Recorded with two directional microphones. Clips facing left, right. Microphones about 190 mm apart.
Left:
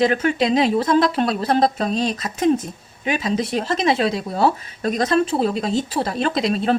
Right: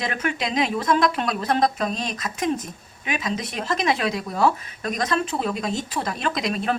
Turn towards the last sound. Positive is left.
turn(degrees=30)  # may be behind; listen again after turning